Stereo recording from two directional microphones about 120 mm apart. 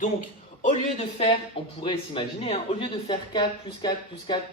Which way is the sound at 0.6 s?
65° left (ahead or behind).